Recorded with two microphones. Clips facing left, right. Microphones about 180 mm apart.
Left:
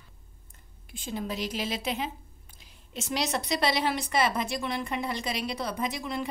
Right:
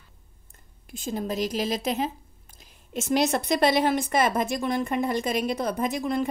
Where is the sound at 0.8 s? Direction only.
45° right (ahead or behind).